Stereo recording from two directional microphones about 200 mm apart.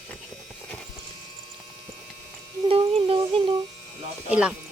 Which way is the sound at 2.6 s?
30° right (ahead or behind).